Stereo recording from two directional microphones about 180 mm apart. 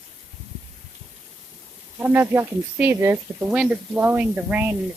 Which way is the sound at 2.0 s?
10° right (ahead or behind).